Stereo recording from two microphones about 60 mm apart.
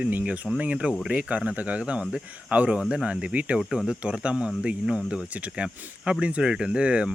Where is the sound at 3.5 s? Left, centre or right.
Centre.